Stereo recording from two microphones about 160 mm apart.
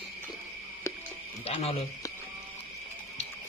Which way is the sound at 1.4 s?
40° left (ahead or behind).